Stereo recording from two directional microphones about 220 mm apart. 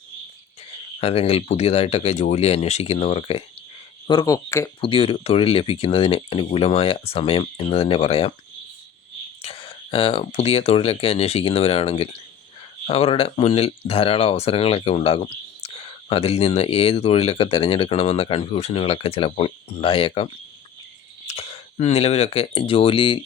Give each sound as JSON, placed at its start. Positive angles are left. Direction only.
{"t": 0.9, "sound": "speech", "side_deg": 25}
{"t": 4.8, "sound": "speech", "side_deg": 25}
{"t": 9.4, "sound": "speech", "side_deg": 25}